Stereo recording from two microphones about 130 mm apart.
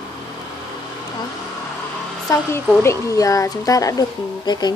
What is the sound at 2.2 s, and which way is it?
Speech, 20° left (ahead or behind).